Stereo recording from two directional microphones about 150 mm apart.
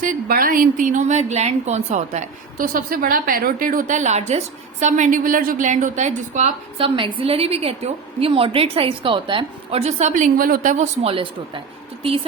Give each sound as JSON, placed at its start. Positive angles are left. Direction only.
{"t": 0.0, "sound": "a woman's voice", "side_deg": -70}
{"t": 6.7, "sound": "a woman's voice", "side_deg": -35}
{"t": 11.0, "sound": "a woman's voice", "side_deg": -35}